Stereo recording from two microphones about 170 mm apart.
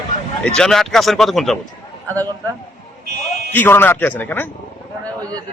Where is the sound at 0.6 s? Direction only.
5° left (ahead or behind).